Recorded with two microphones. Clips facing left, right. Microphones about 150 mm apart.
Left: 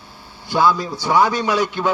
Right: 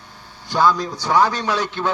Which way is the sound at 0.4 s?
10° left (ahead or behind).